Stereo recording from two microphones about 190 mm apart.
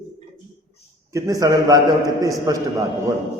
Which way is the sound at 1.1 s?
20° right (ahead or behind).